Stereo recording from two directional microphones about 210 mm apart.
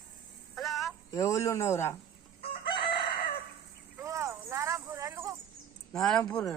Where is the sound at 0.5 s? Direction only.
Centre (ahead or behind).